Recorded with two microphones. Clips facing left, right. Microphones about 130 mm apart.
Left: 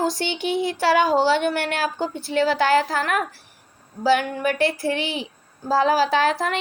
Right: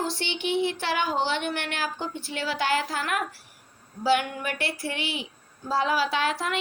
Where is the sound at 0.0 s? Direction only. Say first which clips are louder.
Left 6 dB; 40° left (ahead or behind).